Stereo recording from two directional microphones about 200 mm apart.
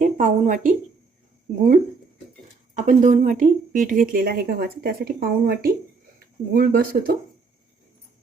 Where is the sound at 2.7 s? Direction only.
40° right (ahead or behind).